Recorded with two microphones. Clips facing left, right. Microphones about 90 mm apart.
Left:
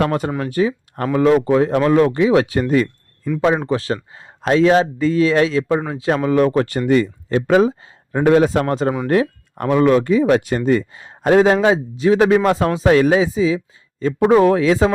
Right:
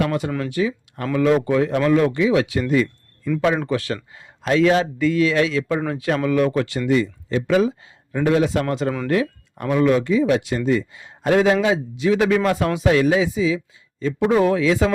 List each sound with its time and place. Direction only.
0.0 s speech: 45° left (ahead or behind)
0.3 s speech: 30° left (ahead or behind)
0.9 s speech: 40° left (ahead or behind)
3.7 s speech: 30° left (ahead or behind)
9.6 s speech: 45° left (ahead or behind)
11.3 s speech: 35° left (ahead or behind)
14.0 s speech: 45° left (ahead or behind)